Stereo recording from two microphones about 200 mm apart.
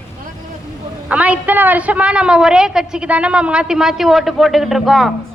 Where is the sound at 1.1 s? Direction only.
5° right (ahead or behind).